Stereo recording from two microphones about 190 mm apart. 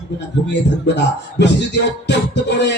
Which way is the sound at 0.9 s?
65° left (ahead or behind).